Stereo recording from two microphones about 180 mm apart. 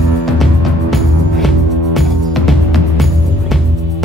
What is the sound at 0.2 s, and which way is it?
Music, centre (ahead or behind).